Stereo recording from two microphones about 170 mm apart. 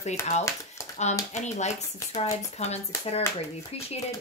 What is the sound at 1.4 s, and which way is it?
A woman's voice, 40° left (ahead or behind).